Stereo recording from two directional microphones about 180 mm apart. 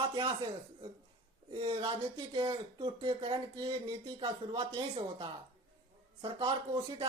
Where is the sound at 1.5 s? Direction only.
30° right (ahead or behind).